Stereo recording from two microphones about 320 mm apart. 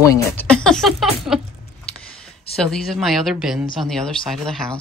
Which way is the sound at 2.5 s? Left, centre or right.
Centre.